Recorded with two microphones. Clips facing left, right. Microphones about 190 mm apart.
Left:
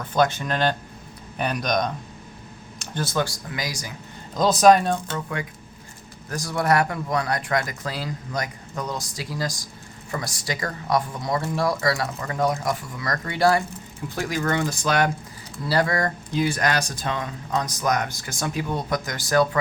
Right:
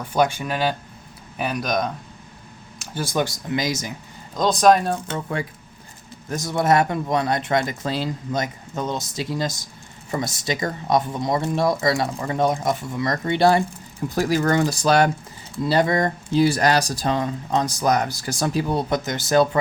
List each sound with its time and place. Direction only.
0.0 s speech: 10° right (ahead or behind)
4.4 s speech: centre (ahead or behind)
5.1 s speech: 30° right (ahead or behind)
15.6 s speech: 20° right (ahead or behind)
16.4 s speech: 35° right (ahead or behind)